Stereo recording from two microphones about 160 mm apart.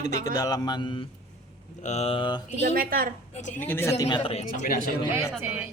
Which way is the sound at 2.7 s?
65° right (ahead or behind).